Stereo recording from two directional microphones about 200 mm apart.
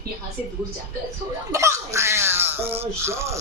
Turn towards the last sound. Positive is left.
turn(degrees=-15)  # may be behind; listen again after turning